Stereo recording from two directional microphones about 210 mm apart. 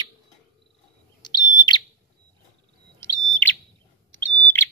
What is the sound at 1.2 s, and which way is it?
Bird, 20° left (ahead or behind).